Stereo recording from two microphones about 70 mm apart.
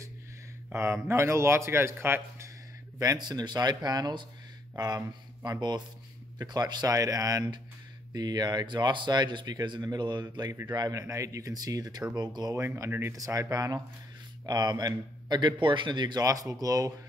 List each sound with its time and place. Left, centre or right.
0.7 s speech: right
3.2 s speech: right
10.7 s speech: right
12.2 s speech: right
12.5 s speech: right
14.4 s speech: right